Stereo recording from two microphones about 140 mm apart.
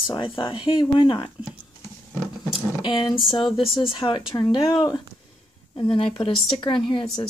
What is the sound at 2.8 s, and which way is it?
Speech, 35° left (ahead or behind).